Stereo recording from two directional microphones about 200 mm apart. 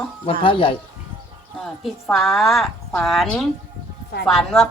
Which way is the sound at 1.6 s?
Centre (ahead or behind).